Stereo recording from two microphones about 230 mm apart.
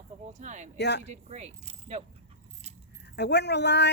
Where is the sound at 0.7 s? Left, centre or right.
Left.